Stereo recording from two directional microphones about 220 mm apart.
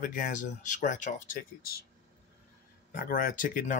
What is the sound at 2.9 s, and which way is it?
Speech, 40° left (ahead or behind).